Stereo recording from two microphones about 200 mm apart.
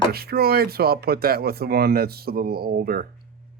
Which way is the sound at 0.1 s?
50° right (ahead or behind).